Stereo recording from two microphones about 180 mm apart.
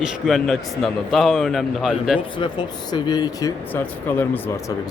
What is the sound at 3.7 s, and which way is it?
Speech, 10° left (ahead or behind).